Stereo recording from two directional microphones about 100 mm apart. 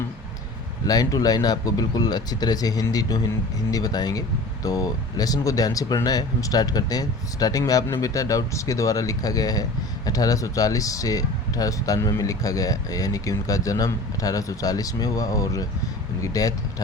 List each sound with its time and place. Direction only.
0.9 s speech: 40° left (ahead or behind)